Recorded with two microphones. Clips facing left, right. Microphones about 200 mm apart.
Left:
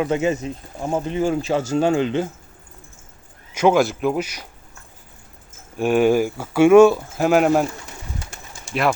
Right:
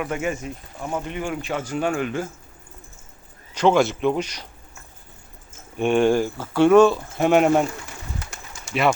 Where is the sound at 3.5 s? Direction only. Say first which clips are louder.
Left 1 dB; 10° left (ahead or behind).